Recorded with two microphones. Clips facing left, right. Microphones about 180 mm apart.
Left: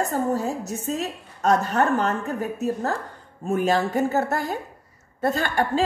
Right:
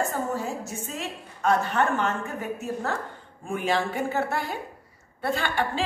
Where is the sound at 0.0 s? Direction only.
40° left (ahead or behind).